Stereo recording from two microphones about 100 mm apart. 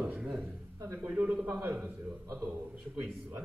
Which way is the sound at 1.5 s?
20° right (ahead or behind).